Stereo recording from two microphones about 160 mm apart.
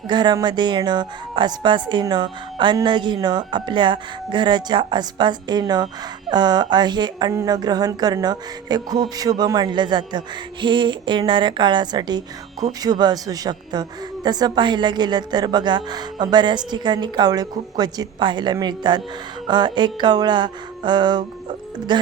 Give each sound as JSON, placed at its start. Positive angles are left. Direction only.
{"t": 0.1, "sound": "speech", "side_deg": -25}